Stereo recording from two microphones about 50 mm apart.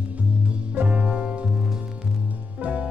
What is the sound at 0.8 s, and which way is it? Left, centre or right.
Music, right.